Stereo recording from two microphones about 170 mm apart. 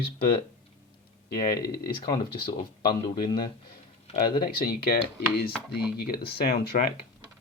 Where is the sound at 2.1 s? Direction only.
25° left (ahead or behind).